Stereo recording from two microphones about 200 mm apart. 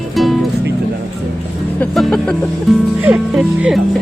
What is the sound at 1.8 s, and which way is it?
Speech, 5° left (ahead or behind).